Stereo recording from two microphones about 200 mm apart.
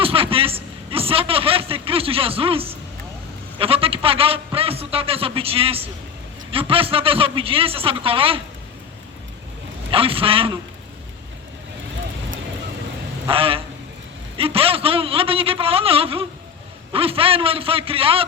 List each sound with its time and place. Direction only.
0.0 s a man's voice: 25° right (ahead or behind)
9.9 s a man's voice: 25° right (ahead or behind)
13.2 s a man's voice: 30° right (ahead or behind)